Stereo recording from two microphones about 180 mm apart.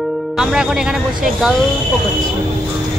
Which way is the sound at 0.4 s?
5° right (ahead or behind).